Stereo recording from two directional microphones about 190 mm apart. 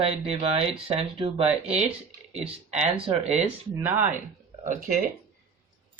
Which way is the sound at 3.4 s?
10° right (ahead or behind).